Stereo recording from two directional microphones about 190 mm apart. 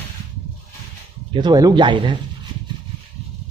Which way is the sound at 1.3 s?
25° right (ahead or behind).